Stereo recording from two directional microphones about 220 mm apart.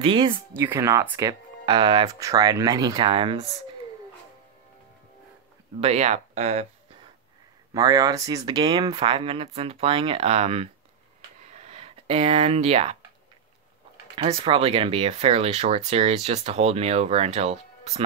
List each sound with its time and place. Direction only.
0.0 s speech: 25° right (ahead or behind)
0.5 s speech: 10° right (ahead or behind)
5.8 s speech: 30° right (ahead or behind)
7.7 s speech: 15° right (ahead or behind)
11.4 s a sound: 30° right (ahead or behind)
14.1 s speech: 25° right (ahead or behind)